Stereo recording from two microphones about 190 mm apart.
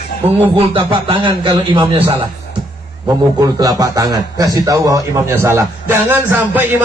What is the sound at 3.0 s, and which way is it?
A man's voice, 20° right (ahead or behind).